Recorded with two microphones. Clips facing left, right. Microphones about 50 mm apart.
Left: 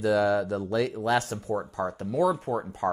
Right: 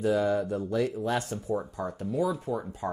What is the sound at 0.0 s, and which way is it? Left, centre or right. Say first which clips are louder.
Speech: left 2 dB; left.